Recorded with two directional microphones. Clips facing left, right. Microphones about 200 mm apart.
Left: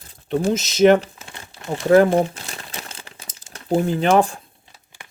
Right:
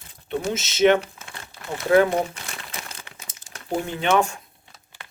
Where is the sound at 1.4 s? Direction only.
35° left (ahead or behind).